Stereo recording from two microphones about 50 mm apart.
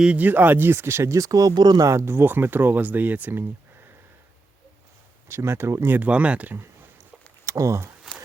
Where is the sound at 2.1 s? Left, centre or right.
Right.